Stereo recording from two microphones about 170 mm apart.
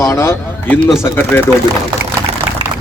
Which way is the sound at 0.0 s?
15° left (ahead or behind).